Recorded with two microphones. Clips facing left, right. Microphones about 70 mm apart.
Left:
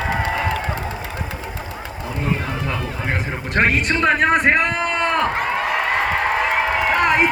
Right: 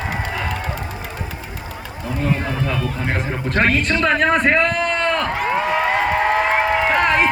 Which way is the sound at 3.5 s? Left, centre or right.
Centre.